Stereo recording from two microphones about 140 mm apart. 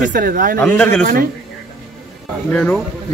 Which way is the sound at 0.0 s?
80° right.